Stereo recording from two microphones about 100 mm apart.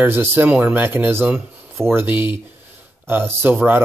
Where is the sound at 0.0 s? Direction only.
25° right (ahead or behind).